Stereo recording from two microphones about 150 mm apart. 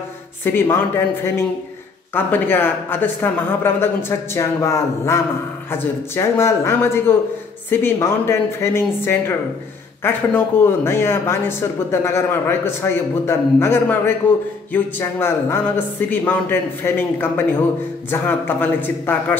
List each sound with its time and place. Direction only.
0.4 s speech: 15° left (ahead or behind)